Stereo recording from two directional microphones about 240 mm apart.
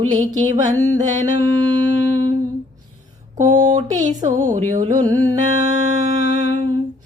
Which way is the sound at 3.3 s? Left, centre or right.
Right.